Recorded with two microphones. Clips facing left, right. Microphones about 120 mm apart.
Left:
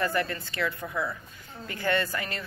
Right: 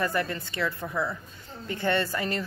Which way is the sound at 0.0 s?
20° right (ahead or behind).